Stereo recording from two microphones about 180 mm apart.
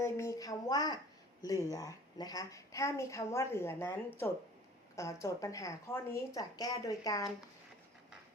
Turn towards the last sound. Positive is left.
turn(degrees=20)  # may be behind; listen again after turning